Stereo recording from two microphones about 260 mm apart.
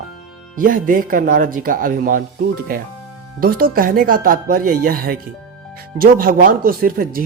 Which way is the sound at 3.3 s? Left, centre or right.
Right.